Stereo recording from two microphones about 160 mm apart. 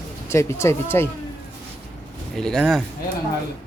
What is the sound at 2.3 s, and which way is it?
Speech, 5° left (ahead or behind).